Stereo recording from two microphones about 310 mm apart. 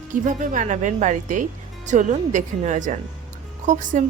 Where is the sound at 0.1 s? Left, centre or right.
Right.